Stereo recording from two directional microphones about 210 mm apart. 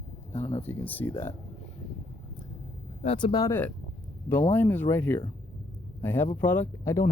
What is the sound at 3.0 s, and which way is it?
Speech, 25° left (ahead or behind).